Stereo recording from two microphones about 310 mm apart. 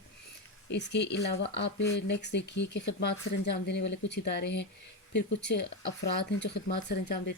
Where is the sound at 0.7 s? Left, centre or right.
Left.